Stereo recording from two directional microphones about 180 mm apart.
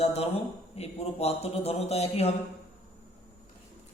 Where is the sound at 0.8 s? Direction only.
35° left (ahead or behind).